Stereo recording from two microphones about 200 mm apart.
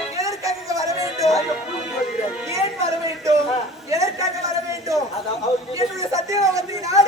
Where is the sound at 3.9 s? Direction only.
15° right (ahead or behind).